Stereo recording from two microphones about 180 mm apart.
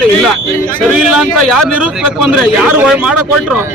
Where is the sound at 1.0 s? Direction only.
5° right (ahead or behind).